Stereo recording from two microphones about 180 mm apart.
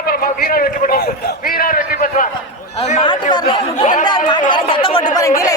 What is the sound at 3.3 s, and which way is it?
Speech, 25° left (ahead or behind).